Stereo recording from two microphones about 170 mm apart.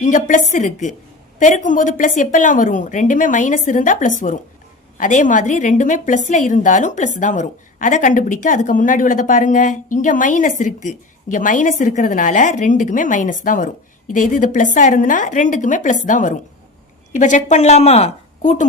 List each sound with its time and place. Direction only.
0.0 s a woman's voice: 50° left (ahead or behind)